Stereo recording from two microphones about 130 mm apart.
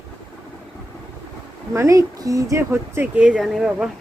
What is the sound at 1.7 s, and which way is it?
Speech, 25° right (ahead or behind).